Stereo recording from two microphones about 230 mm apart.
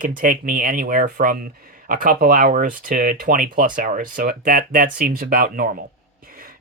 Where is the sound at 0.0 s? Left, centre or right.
Right.